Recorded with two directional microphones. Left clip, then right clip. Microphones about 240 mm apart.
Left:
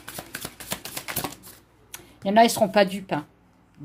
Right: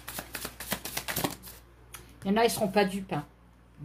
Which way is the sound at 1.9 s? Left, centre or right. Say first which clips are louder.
Left 10 dB; left.